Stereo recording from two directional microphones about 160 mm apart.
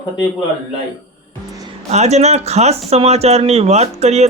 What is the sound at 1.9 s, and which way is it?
Speech, 45° right (ahead or behind).